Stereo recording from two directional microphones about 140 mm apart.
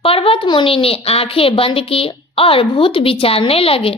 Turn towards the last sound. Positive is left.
turn(degrees=40)  # may be behind; listen again after turning